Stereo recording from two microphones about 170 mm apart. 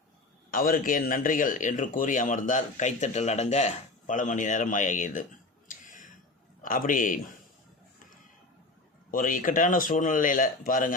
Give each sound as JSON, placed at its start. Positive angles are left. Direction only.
{"t": 0.5, "sound": "speech", "side_deg": 55}
{"t": 5.6, "sound": "a sound", "side_deg": 50}
{"t": 6.6, "sound": "speech", "side_deg": 55}
{"t": 9.1, "sound": "speech", "side_deg": 50}